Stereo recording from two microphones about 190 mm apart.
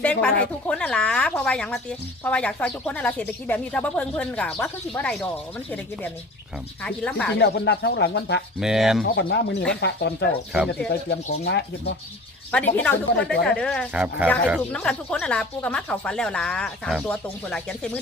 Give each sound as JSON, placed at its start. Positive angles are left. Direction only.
{"t": 0.0, "sound": "a woman's voice", "side_deg": 5}
{"t": 6.8, "sound": "a woman's voice", "side_deg": 5}
{"t": 7.3, "sound": "speech", "side_deg": 65}
{"t": 8.5, "sound": "speech", "side_deg": 0}
{"t": 9.0, "sound": "speech", "side_deg": 60}
{"t": 12.5, "sound": "a woman's voice", "side_deg": 5}
{"t": 13.9, "sound": "speech", "side_deg": -5}
{"t": 14.7, "sound": "speech", "side_deg": 5}